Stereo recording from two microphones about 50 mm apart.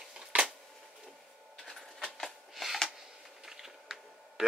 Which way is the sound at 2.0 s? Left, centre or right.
Centre.